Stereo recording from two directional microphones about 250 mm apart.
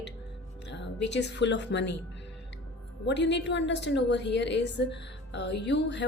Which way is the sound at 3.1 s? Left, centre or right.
Left.